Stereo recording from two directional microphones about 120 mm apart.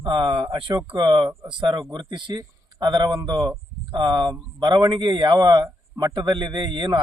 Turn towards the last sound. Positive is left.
turn(degrees=-40)  # may be behind; listen again after turning